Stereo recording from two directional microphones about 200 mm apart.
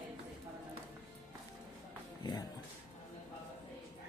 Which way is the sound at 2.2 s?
20° left (ahead or behind).